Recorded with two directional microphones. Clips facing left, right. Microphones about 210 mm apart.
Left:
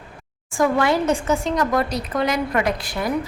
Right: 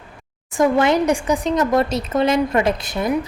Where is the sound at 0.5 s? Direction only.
20° right (ahead or behind).